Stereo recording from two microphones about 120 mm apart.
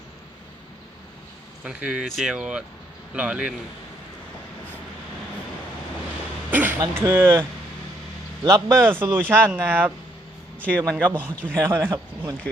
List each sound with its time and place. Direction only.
1.6 s speech: 10° right (ahead or behind)
6.5 s a sound: 15° right (ahead or behind)
6.7 s speech: 25° right (ahead or behind)
8.4 s speech: 25° right (ahead or behind)
10.6 s a man's voice: 10° left (ahead or behind)
11.1 s speech: 15° right (ahead or behind)